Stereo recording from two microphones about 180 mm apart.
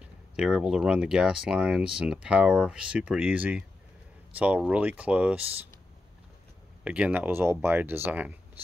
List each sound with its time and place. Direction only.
0.0 s speech: 5° right (ahead or behind)
6.8 s speech: 5° right (ahead or behind)